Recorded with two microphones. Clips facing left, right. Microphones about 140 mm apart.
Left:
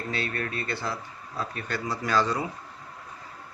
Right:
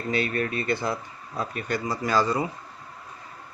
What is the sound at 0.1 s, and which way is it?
Speech, 20° right (ahead or behind).